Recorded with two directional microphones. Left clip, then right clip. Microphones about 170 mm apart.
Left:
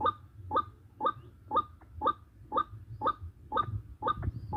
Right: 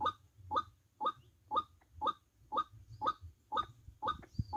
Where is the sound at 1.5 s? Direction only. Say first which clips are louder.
Left 6 dB; 20° right (ahead or behind).